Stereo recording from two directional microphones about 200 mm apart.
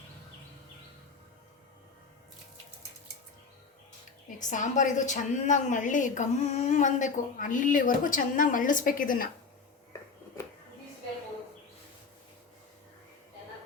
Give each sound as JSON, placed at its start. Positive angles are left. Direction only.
{"t": 4.4, "sound": "a woman's voice", "side_deg": 40}